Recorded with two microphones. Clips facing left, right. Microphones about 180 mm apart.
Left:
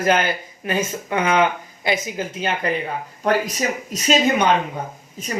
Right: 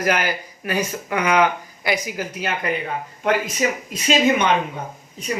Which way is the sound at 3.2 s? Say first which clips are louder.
Even; 40° left (ahead or behind).